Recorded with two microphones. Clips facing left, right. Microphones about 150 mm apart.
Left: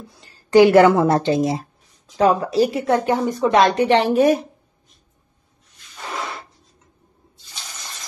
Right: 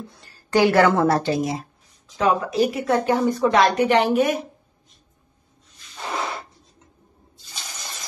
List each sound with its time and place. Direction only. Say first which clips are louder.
0.2 s speech: left 6 dB; 20° left (ahead or behind); by 4.4 s 35° left (ahead or behind)